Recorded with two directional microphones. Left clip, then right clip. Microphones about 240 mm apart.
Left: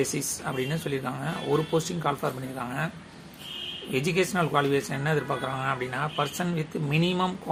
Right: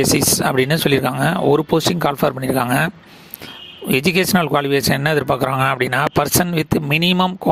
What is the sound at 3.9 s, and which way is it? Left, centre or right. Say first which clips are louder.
Speech: right 10 dB; right.